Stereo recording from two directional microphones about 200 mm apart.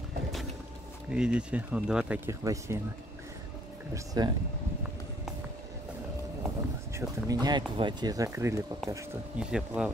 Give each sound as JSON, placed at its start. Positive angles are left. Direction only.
{"t": 1.1, "sound": "speech", "side_deg": -5}
{"t": 3.9, "sound": "speech", "side_deg": -20}
{"t": 6.9, "sound": "speech", "side_deg": -15}